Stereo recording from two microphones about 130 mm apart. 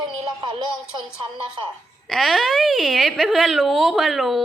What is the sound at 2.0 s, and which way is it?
A woman's voice, centre (ahead or behind).